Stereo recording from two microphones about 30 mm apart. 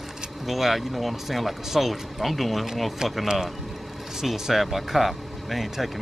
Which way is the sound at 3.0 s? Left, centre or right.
Right.